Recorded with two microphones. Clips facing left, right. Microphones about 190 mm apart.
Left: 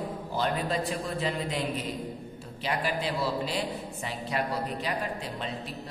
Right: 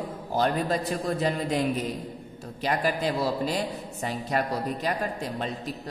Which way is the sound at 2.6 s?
45° right (ahead or behind).